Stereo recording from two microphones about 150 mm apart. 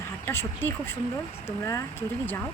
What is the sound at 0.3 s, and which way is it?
Speech, 15° left (ahead or behind).